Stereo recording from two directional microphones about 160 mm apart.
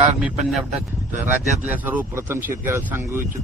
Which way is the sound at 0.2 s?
5° right (ahead or behind).